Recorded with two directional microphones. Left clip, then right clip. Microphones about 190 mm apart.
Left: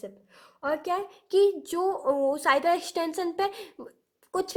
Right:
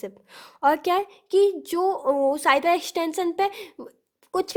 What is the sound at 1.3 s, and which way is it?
A woman's voice, 25° right (ahead or behind).